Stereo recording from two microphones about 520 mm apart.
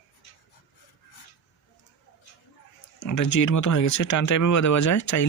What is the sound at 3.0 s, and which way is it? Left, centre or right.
Speech, left.